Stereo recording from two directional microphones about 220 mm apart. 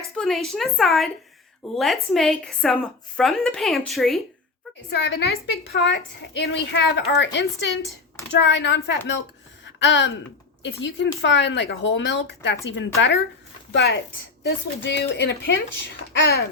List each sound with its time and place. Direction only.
0.2 s a woman's voice: centre (ahead or behind)
4.9 s a woman's voice: 50° left (ahead or behind)
9.6 s a sound: 55° left (ahead or behind)
10.6 s a woman's voice: 55° left (ahead or behind)